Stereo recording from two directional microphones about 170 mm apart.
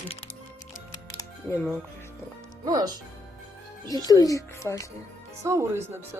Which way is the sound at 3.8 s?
20° left (ahead or behind).